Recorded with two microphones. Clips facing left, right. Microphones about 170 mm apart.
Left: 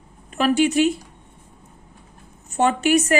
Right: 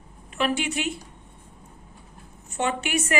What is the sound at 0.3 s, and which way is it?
Speech, 40° left (ahead or behind).